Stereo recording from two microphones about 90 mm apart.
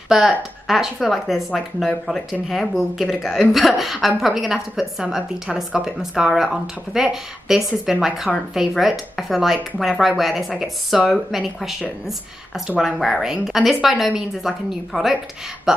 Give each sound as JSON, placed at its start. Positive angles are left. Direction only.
{"t": 0.1, "sound": "a woman's voice", "side_deg": -5}